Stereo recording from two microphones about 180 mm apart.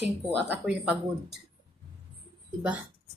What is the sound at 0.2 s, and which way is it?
Speech, 5° right (ahead or behind).